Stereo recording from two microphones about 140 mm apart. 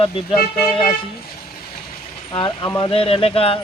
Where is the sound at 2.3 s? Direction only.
35° left (ahead or behind).